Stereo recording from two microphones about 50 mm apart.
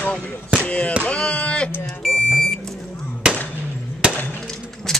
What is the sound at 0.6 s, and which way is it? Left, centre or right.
Speech, left.